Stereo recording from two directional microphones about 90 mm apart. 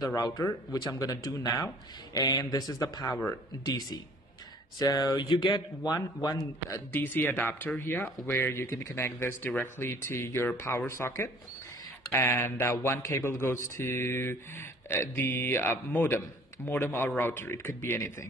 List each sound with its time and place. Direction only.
0.0 s a man's voice: 45° left (ahead or behind)
5.2 s a man's voice: 60° left (ahead or behind); by 6.8 s 40° left (ahead or behind)
6.9 s speech: 20° left (ahead or behind)